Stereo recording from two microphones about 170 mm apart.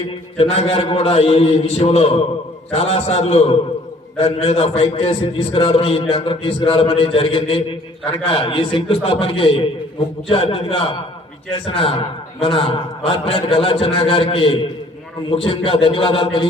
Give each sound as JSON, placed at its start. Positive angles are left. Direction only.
{"t": 0.3, "sound": "a man's voice", "side_deg": 35}